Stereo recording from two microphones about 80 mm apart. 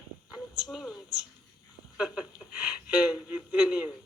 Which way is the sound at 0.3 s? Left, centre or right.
Centre.